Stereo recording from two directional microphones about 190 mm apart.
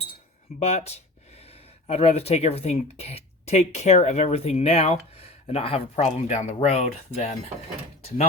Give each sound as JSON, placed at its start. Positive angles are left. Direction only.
{"t": 0.6, "sound": "speech", "side_deg": 35}